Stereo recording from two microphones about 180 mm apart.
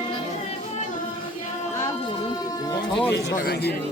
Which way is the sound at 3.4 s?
65° left (ahead or behind).